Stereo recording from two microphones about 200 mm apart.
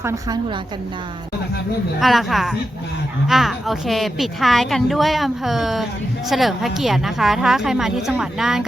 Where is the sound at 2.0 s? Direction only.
Centre (ahead or behind).